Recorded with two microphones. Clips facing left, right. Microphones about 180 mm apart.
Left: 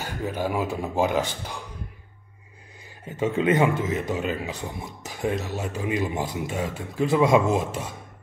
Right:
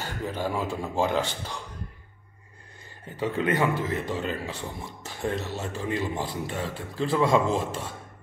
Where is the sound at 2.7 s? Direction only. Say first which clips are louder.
Left 4 dB; 10° left (ahead or behind).